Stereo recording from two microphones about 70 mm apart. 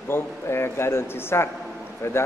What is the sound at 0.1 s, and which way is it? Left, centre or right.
Speech, left.